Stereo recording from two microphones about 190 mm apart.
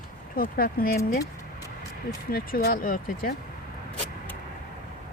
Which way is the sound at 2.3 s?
50° left (ahead or behind).